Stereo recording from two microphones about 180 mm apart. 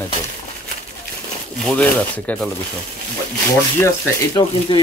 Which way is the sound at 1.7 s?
5° left (ahead or behind).